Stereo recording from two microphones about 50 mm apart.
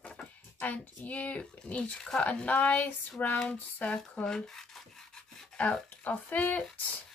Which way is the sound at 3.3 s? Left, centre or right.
Centre.